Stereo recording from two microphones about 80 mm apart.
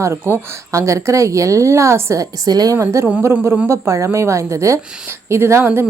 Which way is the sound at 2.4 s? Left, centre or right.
Right.